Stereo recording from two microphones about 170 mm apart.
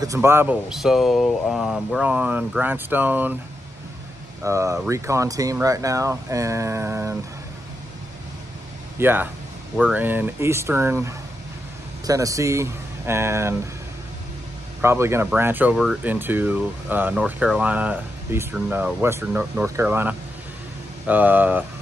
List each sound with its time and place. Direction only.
0.0 s speech: 15° right (ahead or behind)
4.4 s speech: 15° right (ahead or behind)
8.9 s speech: 10° right (ahead or behind)
14.8 s speech: 15° right (ahead or behind)